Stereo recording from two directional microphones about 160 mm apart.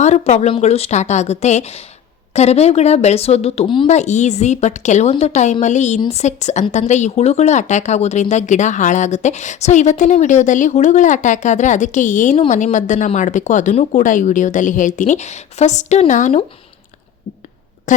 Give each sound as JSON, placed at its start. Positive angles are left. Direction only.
{"t": 0.0, "sound": "speech", "side_deg": 45}
{"t": 3.8, "sound": "speech", "side_deg": 45}
{"t": 17.9, "sound": "speech", "side_deg": 50}